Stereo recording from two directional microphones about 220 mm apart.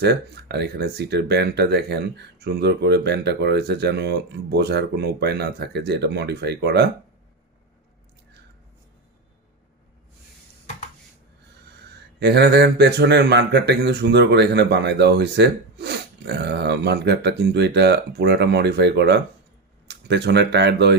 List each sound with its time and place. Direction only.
0.0 s speech: 50° right (ahead or behind)
12.2 s speech: 50° right (ahead or behind)